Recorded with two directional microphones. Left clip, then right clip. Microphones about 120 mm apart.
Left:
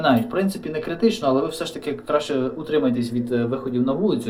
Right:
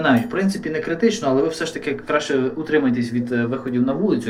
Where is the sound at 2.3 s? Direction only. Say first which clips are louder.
Right 3 dB; 30° left (ahead or behind).